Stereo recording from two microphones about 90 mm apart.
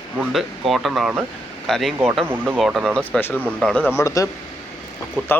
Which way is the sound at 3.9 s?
35° left (ahead or behind).